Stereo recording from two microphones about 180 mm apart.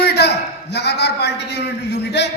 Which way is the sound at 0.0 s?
65° left (ahead or behind).